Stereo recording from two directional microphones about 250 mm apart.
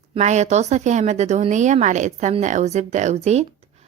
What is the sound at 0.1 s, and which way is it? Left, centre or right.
A woman's voice, right.